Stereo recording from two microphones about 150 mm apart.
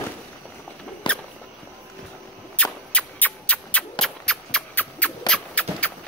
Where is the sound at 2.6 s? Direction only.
10° left (ahead or behind).